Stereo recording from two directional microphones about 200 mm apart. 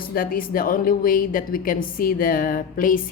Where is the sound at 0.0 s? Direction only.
45° left (ahead or behind).